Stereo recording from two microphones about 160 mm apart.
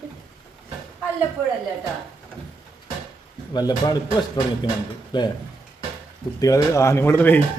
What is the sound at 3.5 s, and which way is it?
Speech, 25° left (ahead or behind).